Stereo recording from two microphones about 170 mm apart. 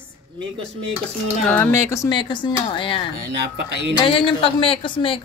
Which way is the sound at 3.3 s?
85° right.